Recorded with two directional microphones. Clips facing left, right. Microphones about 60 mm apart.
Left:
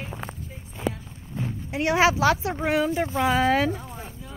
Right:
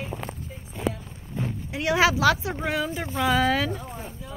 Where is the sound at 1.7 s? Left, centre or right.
Left.